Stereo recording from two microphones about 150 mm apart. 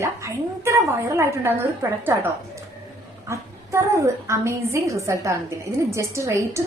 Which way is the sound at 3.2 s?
20° right (ahead or behind).